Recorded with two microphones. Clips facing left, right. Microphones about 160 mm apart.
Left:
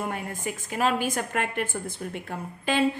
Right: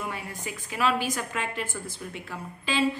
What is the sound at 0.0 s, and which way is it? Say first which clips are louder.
A woman's voice: left 4 dB; 50° left (ahead or behind).